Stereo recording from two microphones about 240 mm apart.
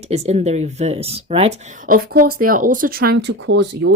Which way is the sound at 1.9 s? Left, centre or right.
Right.